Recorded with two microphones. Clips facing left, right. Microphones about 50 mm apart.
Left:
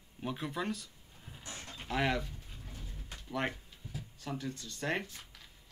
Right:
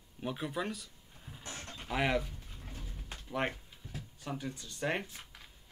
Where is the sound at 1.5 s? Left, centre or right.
Right.